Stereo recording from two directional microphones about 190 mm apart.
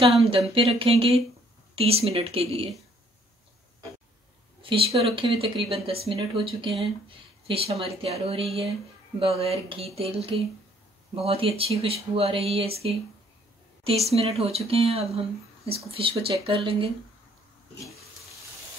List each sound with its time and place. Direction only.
0.0 s speech: 30° right (ahead or behind)
4.6 s speech: 30° right (ahead or behind)